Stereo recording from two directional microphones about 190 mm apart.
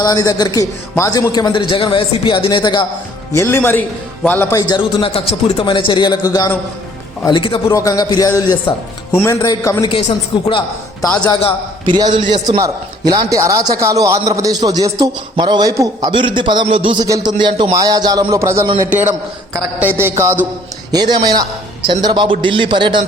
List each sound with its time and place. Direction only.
0.0 s a man's voice: 20° left (ahead or behind)
3.3 s a man's voice: 15° left (ahead or behind)
4.7 s a man's voice: 25° left (ahead or behind)
11.9 s a man's voice: 25° right (ahead or behind)